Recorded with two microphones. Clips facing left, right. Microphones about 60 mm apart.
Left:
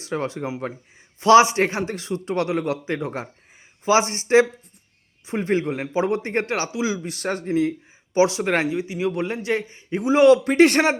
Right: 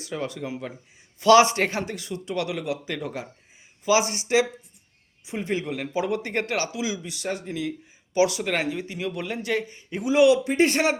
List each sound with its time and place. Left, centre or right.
0.0 s a man's voice: left
1.2 s a man's voice: left
5.6 s a man's voice: left
8.1 s a man's voice: left
8.7 s a man's voice: centre; by 10.5 s left
10.5 s speech: left